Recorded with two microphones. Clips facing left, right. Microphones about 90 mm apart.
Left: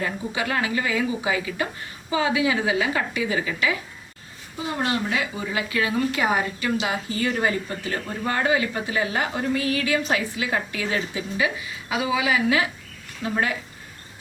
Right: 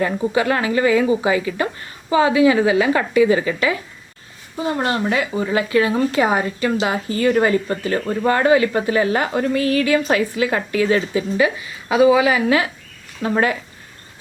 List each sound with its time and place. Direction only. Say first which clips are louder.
0.0 s a woman's voice: right 9 dB; 45° right (ahead or behind)
2.8 s a woman's voice: right 10 dB; 45° right (ahead or behind)
13.2 s speech: right 6 dB; 70° right (ahead or behind)